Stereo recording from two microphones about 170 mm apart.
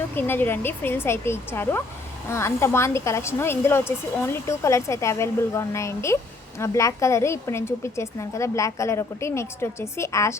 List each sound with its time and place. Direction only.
0.2 s a woman's voice: 10° left (ahead or behind)